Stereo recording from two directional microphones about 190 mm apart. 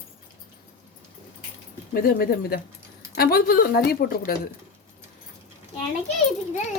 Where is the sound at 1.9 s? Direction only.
50° left (ahead or behind).